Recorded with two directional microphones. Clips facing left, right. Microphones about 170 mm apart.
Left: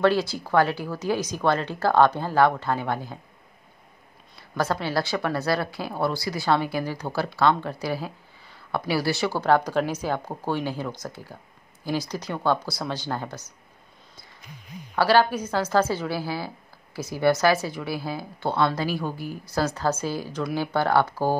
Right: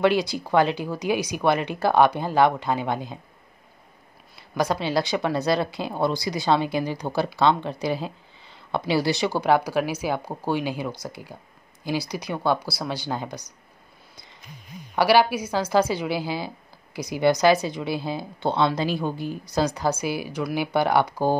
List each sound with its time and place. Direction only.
0.0 s a woman's voice: 15° right (ahead or behind)
4.6 s a woman's voice: 15° right (ahead or behind)
15.0 s a woman's voice: 10° right (ahead or behind)